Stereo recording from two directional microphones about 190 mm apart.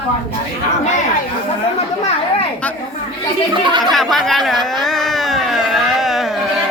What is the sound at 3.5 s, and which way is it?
Speech, 25° right (ahead or behind).